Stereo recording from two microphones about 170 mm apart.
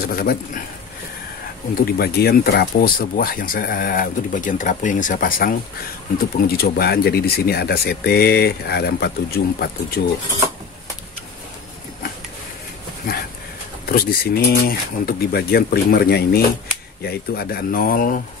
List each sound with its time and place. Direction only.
0.0 s speech: 65° left (ahead or behind)
1.9 s speech: 65° left (ahead or behind)
13.8 s speech: 60° left (ahead or behind)